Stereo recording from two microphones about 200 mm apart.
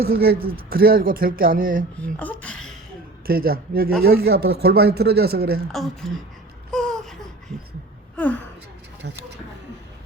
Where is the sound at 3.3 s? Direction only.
50° right (ahead or behind).